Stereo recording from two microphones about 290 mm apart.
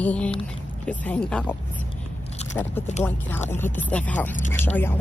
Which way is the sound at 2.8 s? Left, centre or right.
Centre.